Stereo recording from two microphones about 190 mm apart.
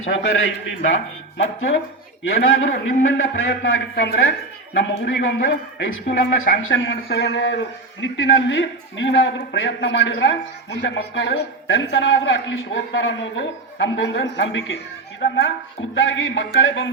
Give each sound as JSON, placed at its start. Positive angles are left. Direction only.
{"t": 0.0, "sound": "a man's voice", "side_deg": 90}
{"t": 1.4, "sound": "a man's voice", "side_deg": 80}
{"t": 16.0, "sound": "a man's voice", "side_deg": 80}